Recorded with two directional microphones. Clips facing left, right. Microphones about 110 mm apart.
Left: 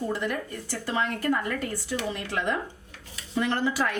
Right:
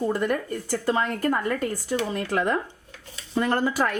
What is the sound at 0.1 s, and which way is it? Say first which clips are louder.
Speech: right 5 dB; 45° right (ahead or behind).